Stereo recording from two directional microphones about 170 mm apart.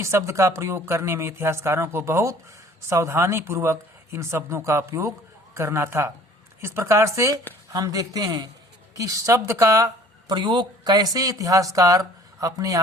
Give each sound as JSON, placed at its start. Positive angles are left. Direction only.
{"t": 0.0, "sound": "a woman's voice", "side_deg": -15}